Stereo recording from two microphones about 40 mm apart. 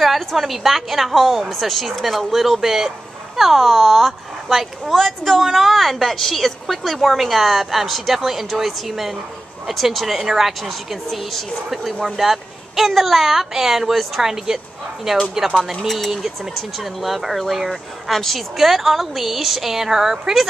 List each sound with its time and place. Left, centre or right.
0.0 s speech: centre
15.9 s speech: centre